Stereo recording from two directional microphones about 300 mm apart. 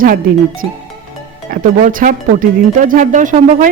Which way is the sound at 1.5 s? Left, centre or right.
Right.